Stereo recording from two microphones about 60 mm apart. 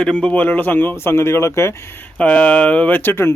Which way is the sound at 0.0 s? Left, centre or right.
Centre.